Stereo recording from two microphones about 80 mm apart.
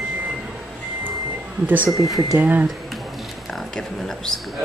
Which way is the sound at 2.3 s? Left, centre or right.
Right.